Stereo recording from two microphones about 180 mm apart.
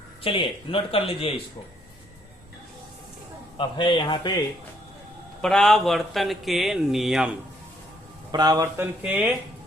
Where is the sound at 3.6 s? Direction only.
25° left (ahead or behind).